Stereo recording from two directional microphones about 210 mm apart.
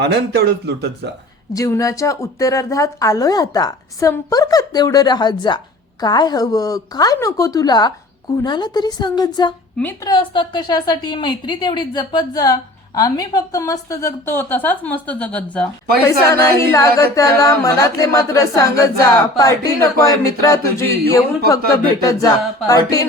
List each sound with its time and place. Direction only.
0.0 s a man's voice: 50° right (ahead or behind)
1.5 s a woman's voice: 15° left (ahead or behind)
22.0 s a woman's voice: 15° left (ahead or behind)